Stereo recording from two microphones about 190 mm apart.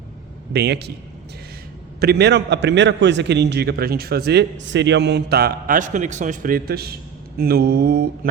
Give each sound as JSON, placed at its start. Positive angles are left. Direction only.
{"t": 0.5, "sound": "a man's voice", "side_deg": -65}
{"t": 2.0, "sound": "a man's voice", "side_deg": -60}